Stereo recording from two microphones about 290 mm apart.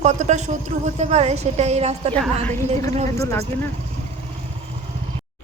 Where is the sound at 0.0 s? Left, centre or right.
Right.